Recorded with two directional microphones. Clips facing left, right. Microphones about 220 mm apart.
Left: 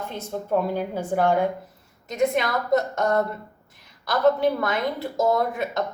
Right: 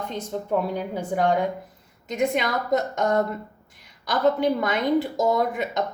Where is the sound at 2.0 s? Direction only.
15° right (ahead or behind).